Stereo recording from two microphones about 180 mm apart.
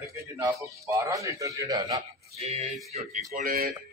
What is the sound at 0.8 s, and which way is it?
A man's voice, 15° right (ahead or behind).